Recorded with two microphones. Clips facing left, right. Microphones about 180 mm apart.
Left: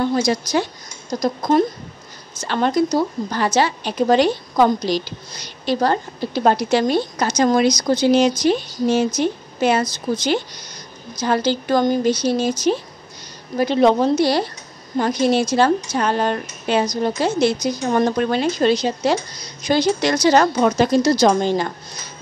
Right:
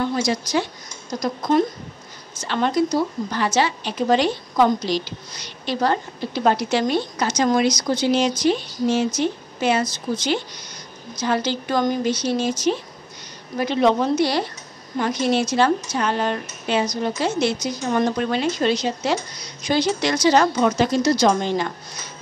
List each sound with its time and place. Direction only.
0.0 s a woman's voice: 40° left (ahead or behind)
2.4 s a woman's voice: 40° left (ahead or behind)